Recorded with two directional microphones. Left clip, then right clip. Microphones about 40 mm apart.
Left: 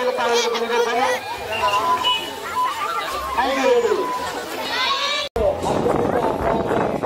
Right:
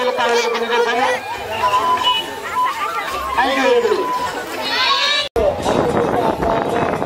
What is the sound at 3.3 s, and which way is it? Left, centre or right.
Speech, centre.